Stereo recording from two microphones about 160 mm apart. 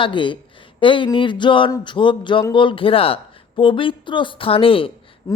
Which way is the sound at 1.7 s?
30° left (ahead or behind).